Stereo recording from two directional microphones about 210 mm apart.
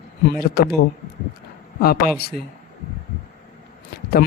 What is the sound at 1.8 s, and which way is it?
Speech, 50° left (ahead or behind).